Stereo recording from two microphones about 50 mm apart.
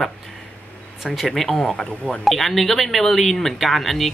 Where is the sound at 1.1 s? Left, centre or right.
Centre.